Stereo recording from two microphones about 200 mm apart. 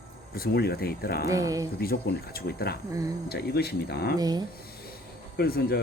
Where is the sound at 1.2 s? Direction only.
15° right (ahead or behind).